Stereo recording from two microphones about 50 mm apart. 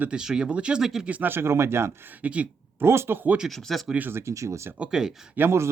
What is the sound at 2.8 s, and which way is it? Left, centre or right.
Speech, right.